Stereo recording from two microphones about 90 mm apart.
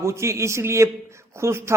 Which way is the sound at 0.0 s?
30° right (ahead or behind).